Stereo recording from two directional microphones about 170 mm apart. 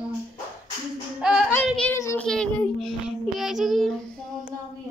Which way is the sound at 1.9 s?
15° left (ahead or behind).